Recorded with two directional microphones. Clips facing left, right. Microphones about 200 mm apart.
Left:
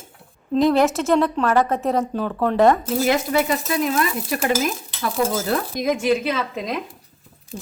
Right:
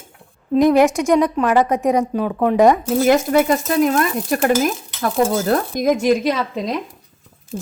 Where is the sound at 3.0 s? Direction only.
45° right (ahead or behind).